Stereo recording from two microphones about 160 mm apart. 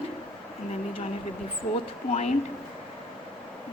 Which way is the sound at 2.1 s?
45° left (ahead or behind).